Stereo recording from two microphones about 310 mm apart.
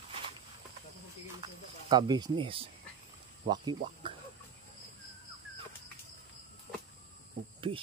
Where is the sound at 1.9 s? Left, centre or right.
Centre.